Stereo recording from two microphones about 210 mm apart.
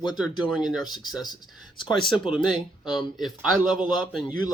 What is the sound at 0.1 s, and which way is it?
Speech, centre (ahead or behind).